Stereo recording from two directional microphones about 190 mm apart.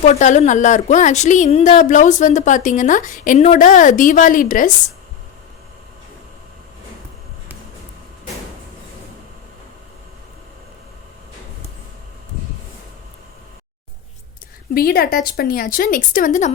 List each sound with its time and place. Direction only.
0.0 s a woman's voice: 40° left (ahead or behind)
14.7 s speech: 50° left (ahead or behind)